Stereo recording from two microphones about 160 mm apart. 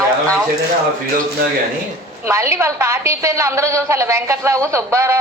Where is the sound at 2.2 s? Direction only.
15° right (ahead or behind).